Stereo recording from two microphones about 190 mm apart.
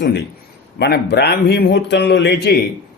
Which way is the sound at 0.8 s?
60° left (ahead or behind).